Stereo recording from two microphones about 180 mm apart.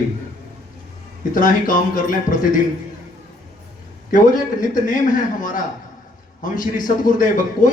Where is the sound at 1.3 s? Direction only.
50° left (ahead or behind).